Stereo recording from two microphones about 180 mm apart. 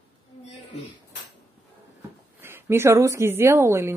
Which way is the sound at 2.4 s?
15° right (ahead or behind).